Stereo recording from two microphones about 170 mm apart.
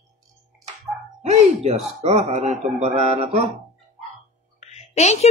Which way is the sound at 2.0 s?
40° right (ahead or behind).